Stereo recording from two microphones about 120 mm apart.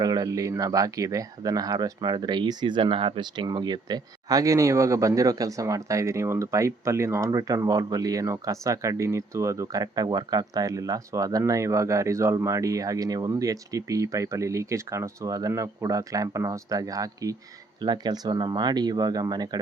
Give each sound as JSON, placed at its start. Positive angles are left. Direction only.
{"t": 0.0, "sound": "speech", "side_deg": -30}